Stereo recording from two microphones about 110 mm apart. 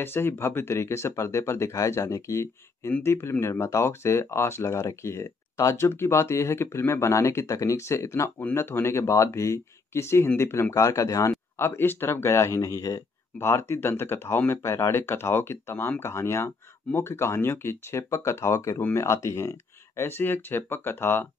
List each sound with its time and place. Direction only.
0.0 s speech: 20° left (ahead or behind)